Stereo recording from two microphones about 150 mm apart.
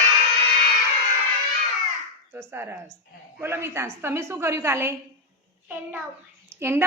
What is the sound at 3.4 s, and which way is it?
A woman's voice, 15° right (ahead or behind).